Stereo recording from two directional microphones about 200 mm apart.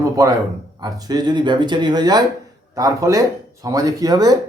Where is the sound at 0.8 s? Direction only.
20° right (ahead or behind).